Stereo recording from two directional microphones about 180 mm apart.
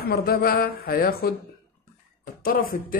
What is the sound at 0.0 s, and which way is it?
Speech, 60° left (ahead or behind).